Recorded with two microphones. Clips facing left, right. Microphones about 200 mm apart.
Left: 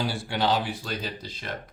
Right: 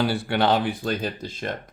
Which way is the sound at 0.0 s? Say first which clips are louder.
Right 5 dB; 60° right (ahead or behind).